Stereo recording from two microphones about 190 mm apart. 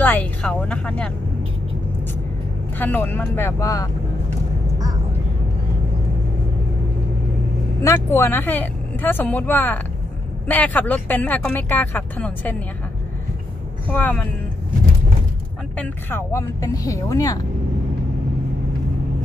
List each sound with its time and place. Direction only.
0.0 s speech: 10° left (ahead or behind)
2.8 s speech: 10° left (ahead or behind)
7.8 s speech: 15° left (ahead or behind)
13.8 s speech: 10° left (ahead or behind)
15.8 s speech: 10° left (ahead or behind)